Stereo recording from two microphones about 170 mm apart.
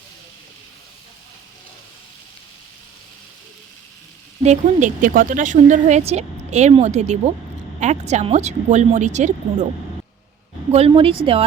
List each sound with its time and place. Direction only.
4.4 s a woman's voice: 50° right (ahead or behind)
10.7 s speech: 35° right (ahead or behind)